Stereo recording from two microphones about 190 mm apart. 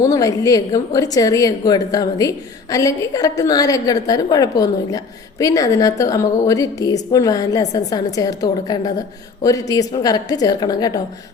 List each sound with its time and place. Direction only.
0.0 s a woman's voice: 15° left (ahead or behind)